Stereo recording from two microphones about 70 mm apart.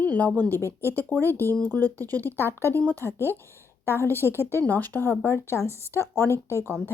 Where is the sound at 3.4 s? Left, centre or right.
Left.